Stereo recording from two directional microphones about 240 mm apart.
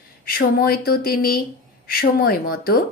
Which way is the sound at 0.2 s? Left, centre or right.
Left.